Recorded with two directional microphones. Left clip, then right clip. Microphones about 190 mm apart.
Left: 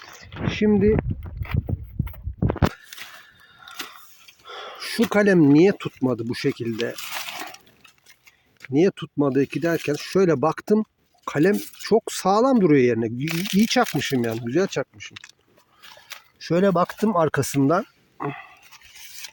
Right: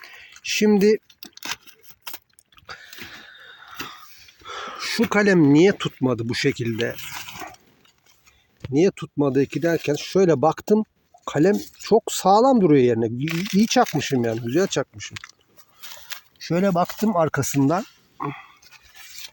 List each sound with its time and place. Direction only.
0.4 s speech: 5° right (ahead or behind)
3.4 s a sound: 5° left (ahead or behind)
4.4 s speech: 10° left (ahead or behind)
7.1 s a sound: 55° left (ahead or behind)
8.6 s speech: centre (ahead or behind)
13.2 s speech: 45° left (ahead or behind)
13.6 s speech: centre (ahead or behind)
16.4 s speech: 5° left (ahead or behind)
18.2 s dog: 20° left (ahead or behind)